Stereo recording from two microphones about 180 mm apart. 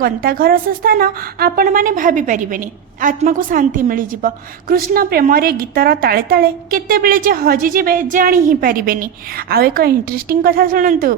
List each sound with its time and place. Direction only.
0.0 s a woman's voice: 55° right (ahead or behind)